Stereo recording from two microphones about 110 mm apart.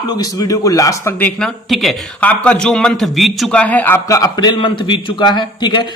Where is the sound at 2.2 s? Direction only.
10° left (ahead or behind).